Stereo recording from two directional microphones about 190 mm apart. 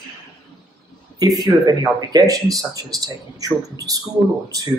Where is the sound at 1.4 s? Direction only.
20° right (ahead or behind).